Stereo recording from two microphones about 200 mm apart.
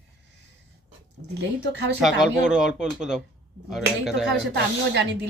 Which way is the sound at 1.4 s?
60° right (ahead or behind).